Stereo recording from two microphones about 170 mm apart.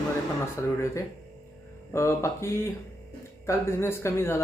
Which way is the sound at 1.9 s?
15° left (ahead or behind).